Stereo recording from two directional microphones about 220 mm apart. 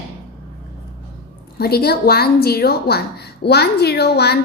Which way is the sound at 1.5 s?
45° left (ahead or behind).